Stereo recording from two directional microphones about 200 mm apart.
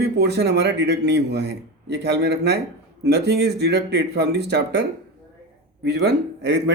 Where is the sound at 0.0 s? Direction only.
55° right (ahead or behind).